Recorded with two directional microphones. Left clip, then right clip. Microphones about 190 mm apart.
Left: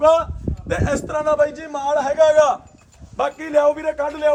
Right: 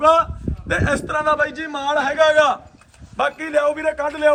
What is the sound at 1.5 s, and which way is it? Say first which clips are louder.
A man's voice: even; 55° left (ahead or behind).